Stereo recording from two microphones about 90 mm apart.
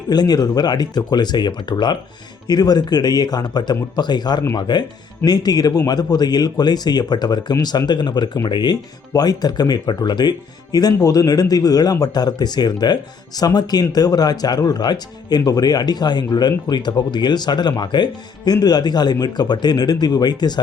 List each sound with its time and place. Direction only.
0.1 s speech: 45° left (ahead or behind)